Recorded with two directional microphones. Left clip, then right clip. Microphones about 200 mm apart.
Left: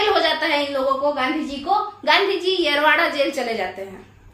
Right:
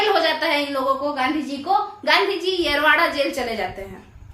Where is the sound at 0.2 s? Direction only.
10° right (ahead or behind).